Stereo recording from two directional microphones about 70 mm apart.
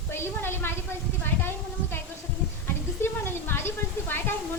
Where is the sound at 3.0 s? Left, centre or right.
Left.